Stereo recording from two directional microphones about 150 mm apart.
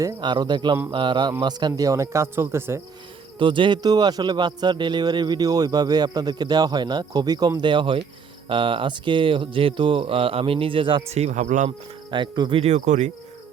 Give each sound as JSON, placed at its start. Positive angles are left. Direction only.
{"t": 0.0, "sound": "speech", "side_deg": -30}
{"t": 3.3, "sound": "speech", "side_deg": -35}
{"t": 11.1, "sound": "speech", "side_deg": -50}
{"t": 12.1, "sound": "speech", "side_deg": -35}
{"t": 12.6, "sound": "speech", "side_deg": -50}